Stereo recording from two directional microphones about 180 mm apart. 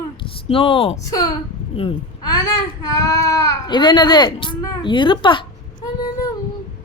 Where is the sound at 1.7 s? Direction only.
30° left (ahead or behind).